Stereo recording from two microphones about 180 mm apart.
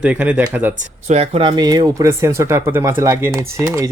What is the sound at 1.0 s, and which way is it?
Speech, 35° right (ahead or behind).